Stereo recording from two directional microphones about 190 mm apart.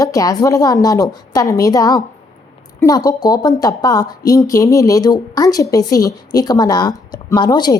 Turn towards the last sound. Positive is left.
turn(degrees=20)  # may be behind; listen again after turning